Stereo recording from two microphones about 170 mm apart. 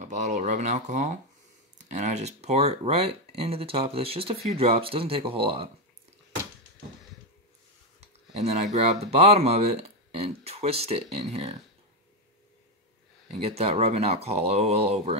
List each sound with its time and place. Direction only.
0.0 s speech: 45° right (ahead or behind)
8.4 s speech: 40° right (ahead or behind)
13.4 s speech: 35° right (ahead or behind)